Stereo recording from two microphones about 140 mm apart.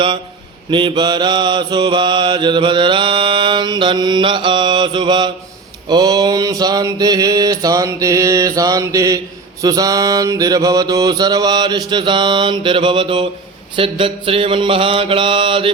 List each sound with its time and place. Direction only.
0.7 s mantra: 35° right (ahead or behind)